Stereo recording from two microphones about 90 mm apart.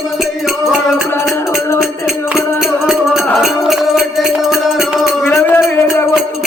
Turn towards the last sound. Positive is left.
turn(degrees=20)  # may be behind; listen again after turning